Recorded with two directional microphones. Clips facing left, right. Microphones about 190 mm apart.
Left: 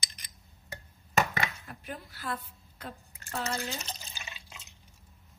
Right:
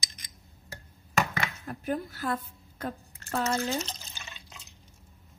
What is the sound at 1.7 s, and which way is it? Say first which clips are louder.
A woman's voice: right 11 dB; 45° right (ahead or behind).